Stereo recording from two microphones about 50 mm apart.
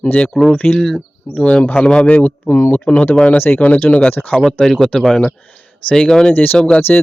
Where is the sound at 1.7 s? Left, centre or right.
Centre.